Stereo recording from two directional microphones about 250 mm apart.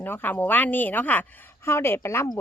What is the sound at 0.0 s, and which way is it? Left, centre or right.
Speech, centre.